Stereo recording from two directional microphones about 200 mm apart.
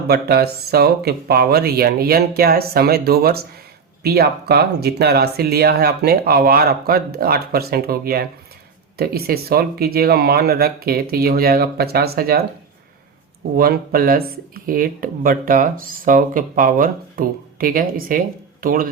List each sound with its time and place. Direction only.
0.1 s speech: 50° right (ahead or behind)
13.6 s speech: 50° right (ahead or behind)